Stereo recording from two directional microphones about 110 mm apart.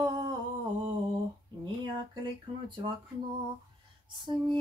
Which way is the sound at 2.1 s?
45° right (ahead or behind).